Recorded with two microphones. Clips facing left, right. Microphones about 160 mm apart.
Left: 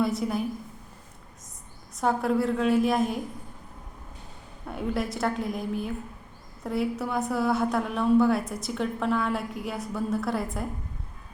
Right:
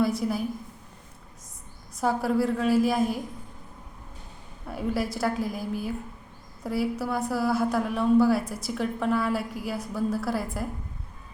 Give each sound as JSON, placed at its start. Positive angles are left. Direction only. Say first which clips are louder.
{"t": 0.0, "sound": "a woman's voice", "louder": "right 1 dB", "side_deg": 0}
{"t": 2.0, "sound": "a woman's voice", "louder": "even", "side_deg": 0}
{"t": 4.7, "sound": "a woman's voice", "louder": "right 1 dB", "side_deg": 0}